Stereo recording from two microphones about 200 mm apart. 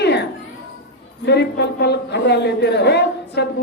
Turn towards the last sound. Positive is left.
turn(degrees=55)  # may be behind; listen again after turning